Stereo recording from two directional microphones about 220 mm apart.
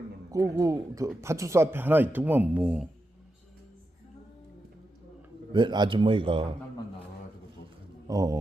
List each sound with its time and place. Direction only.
0.5 s speech: 15° right (ahead or behind)
5.5 s a man's voice: 20° right (ahead or behind)
8.0 s speech: 15° right (ahead or behind)